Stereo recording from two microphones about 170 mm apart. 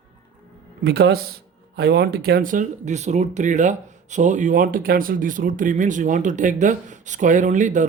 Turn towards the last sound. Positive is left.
turn(degrees=-45)  # may be behind; listen again after turning